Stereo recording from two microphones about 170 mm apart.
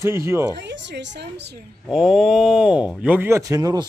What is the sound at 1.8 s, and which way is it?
Speech, centre (ahead or behind).